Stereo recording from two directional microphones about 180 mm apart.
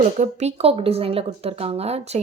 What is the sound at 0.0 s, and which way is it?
Speech, 40° right (ahead or behind).